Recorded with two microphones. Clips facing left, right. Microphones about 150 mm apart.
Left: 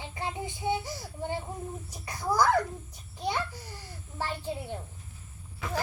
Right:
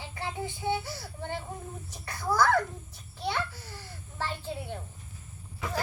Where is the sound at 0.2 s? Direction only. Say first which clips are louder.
Even; 20° left (ahead or behind).